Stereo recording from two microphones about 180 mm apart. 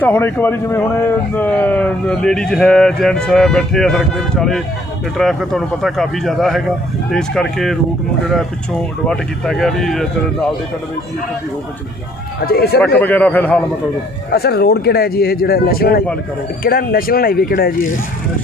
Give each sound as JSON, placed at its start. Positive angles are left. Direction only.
{"t": 0.0, "sound": "speech", "side_deg": 15}
{"t": 9.0, "sound": "speech", "side_deg": 0}
{"t": 12.5, "sound": "speech", "side_deg": 60}
{"t": 13.0, "sound": "a man's voice", "side_deg": 10}
{"t": 14.3, "sound": "speech", "side_deg": 60}